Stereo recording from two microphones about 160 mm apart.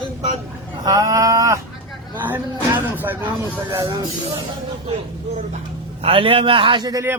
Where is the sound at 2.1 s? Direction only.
10° right (ahead or behind).